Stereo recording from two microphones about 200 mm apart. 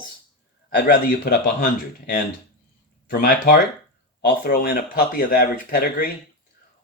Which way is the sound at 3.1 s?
50° left (ahead or behind).